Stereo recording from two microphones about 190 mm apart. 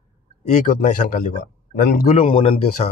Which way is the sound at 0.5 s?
45° left (ahead or behind).